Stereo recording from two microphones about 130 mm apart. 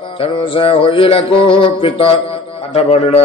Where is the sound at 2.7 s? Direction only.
55° left (ahead or behind).